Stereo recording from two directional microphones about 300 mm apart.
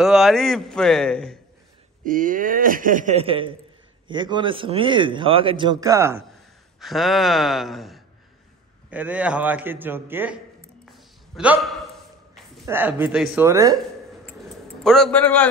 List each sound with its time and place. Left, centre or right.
0.0 s a man's voice: centre
2.0 s a man's voice: right; by 10.4 s centre
10.9 s a sound: centre
12.4 s speech: centre
14.8 s a man's voice: centre